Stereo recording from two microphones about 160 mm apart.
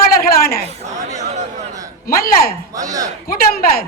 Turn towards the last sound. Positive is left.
turn(degrees=70)  # may be behind; listen again after turning